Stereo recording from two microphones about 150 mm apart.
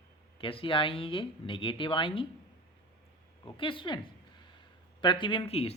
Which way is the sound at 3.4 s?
35° left (ahead or behind).